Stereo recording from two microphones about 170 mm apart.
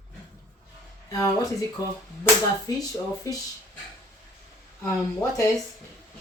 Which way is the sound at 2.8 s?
20° left (ahead or behind).